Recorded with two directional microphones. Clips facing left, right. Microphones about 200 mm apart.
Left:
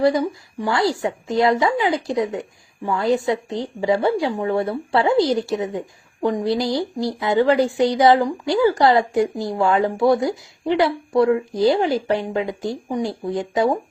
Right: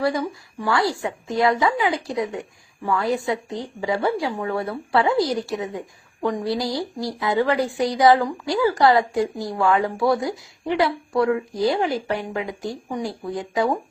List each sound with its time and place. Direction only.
0.6 s speech: 25° left (ahead or behind)